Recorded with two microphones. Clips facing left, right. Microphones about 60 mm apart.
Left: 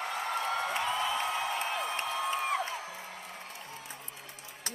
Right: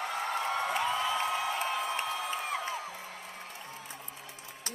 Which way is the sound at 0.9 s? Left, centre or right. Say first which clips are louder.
Right 1 dB; centre.